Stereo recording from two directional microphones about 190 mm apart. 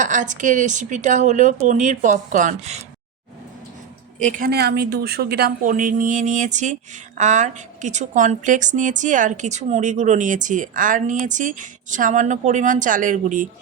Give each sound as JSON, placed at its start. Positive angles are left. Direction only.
{"t": 0.0, "sound": "a woman's voice", "side_deg": -40}
{"t": 4.2, "sound": "a woman's voice", "side_deg": -45}